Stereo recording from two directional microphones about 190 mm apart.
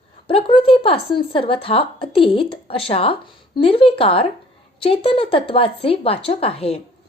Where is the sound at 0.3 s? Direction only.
30° left (ahead or behind).